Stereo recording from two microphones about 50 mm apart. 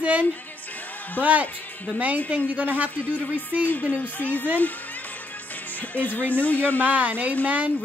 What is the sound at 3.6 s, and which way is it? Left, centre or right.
Speech, left.